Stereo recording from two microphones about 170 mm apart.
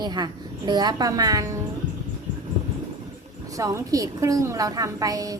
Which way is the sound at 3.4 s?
20° right (ahead or behind).